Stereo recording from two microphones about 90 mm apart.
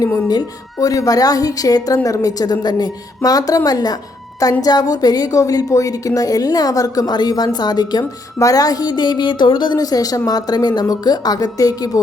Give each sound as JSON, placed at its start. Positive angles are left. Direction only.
{"t": 0.3, "sound": "a woman's voice", "side_deg": 45}
{"t": 8.4, "sound": "a woman's voice", "side_deg": 40}